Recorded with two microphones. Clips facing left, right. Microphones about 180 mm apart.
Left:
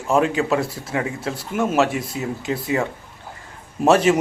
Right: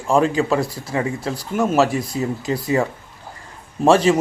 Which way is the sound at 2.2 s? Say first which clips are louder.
Right 5 dB; 40° right (ahead or behind).